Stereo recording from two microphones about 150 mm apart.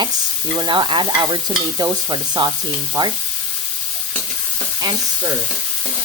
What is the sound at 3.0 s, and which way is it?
Speech, 25° right (ahead or behind).